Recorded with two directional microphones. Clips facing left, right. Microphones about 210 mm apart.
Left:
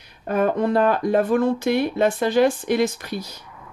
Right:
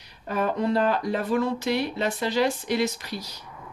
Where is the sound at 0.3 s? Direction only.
50° left (ahead or behind).